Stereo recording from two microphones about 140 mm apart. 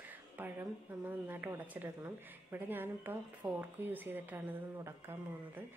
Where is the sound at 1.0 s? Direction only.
15° right (ahead or behind).